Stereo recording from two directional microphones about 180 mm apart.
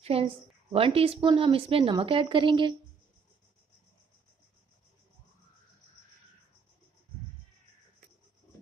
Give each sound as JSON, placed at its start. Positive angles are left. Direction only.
{"t": 0.0, "sound": "a woman's voice", "side_deg": -30}